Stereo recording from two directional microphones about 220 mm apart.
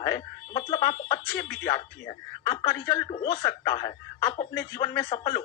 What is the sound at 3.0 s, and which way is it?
Speech, 20° left (ahead or behind).